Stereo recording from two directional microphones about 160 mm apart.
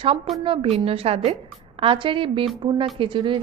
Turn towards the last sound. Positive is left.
turn(degrees=-30)  # may be behind; listen again after turning